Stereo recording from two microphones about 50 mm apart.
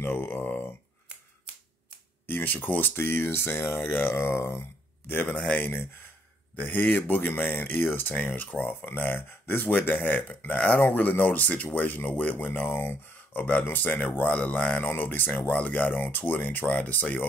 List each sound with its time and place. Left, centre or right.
0.0 s a sound: left
2.2 s speech: left
5.0 s speech: left
5.4 s speech: left
6.5 s speech: left
12.7 s speech: left
13.4 s speech: left
14.8 s speech: left